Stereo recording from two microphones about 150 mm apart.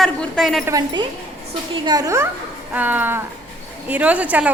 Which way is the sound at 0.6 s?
25° right (ahead or behind).